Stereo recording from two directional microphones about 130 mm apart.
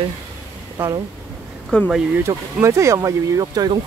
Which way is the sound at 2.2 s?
25° right (ahead or behind).